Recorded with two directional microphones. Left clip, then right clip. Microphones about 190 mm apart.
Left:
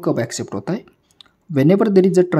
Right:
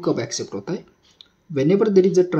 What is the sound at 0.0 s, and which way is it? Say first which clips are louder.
Speech: left 2 dB; 45° left (ahead or behind).